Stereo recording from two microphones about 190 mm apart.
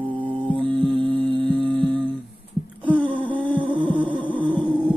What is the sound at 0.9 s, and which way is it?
Music, 25° right (ahead or behind).